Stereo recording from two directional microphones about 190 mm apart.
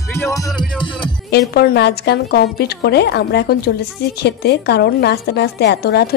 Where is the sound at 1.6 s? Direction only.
60° left (ahead or behind).